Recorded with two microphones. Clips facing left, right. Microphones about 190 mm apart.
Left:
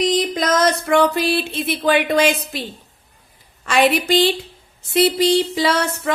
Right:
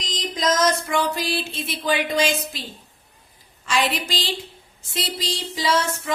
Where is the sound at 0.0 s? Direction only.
60° left (ahead or behind).